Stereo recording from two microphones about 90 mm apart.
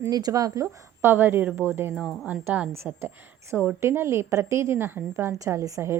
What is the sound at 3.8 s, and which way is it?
A woman's voice, 30° right (ahead or behind).